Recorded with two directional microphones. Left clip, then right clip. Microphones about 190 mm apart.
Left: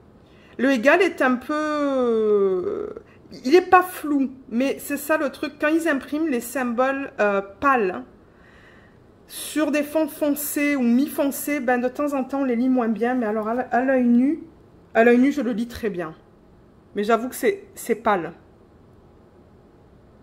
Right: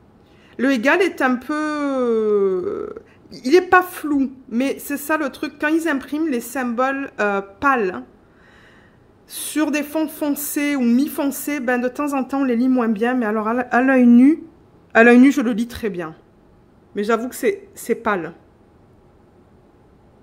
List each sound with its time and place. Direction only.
0.6 s speech: 20° right (ahead or behind)
9.3 s speech: 20° right (ahead or behind); by 14.4 s 60° right (ahead or behind)
14.9 s a man's voice: 50° right (ahead or behind)
15.5 s speech: 25° right (ahead or behind)